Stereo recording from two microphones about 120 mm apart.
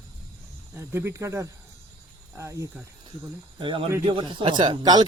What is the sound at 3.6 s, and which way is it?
Speech, 45° right (ahead or behind).